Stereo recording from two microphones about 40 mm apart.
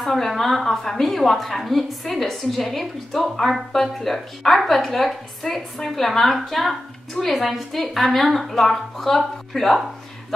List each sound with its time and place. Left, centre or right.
0.0 s a woman's voice: centre